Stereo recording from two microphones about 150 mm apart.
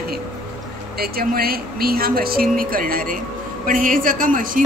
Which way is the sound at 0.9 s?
90° right.